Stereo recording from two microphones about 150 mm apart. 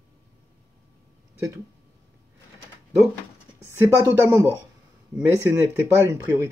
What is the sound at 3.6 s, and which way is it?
Speech, 15° right (ahead or behind).